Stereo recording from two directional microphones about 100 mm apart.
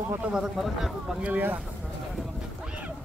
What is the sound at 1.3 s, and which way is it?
Speech, 15° right (ahead or behind).